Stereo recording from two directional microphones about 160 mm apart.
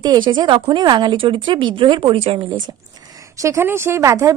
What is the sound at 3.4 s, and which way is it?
Speech, 15° right (ahead or behind).